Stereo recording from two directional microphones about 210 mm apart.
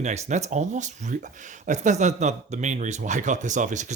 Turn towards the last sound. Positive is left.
turn(degrees=-35)  # may be behind; listen again after turning